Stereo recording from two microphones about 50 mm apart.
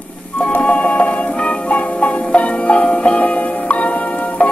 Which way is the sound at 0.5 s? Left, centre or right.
Left.